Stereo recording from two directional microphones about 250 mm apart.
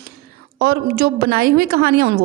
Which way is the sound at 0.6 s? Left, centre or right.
Right.